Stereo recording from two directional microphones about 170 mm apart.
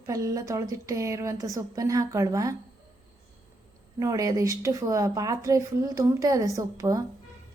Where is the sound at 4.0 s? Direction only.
20° right (ahead or behind).